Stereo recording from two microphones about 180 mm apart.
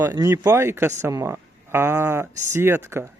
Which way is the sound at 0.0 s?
15° right (ahead or behind).